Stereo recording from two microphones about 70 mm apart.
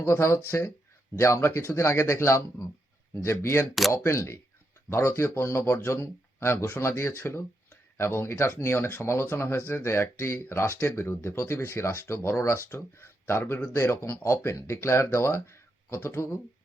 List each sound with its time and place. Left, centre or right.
0.0 s speech: left